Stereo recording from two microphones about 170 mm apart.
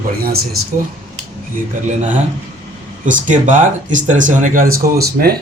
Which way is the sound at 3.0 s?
50° right (ahead or behind).